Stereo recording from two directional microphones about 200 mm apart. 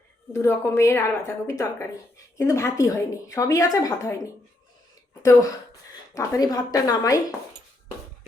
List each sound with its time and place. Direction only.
0.3 s a woman's voice: 15° left (ahead or behind)
6.1 s speech: 20° left (ahead or behind)